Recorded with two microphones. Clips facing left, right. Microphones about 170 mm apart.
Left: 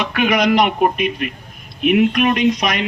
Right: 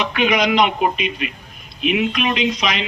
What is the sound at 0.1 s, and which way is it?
A man's voice, 55° left (ahead or behind).